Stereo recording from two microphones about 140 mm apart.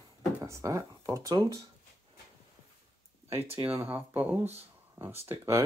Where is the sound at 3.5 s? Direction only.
15° right (ahead or behind).